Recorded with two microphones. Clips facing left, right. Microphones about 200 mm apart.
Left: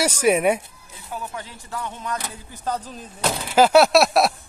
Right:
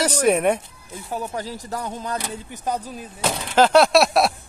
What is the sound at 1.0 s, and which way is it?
Speech, 40° right (ahead or behind).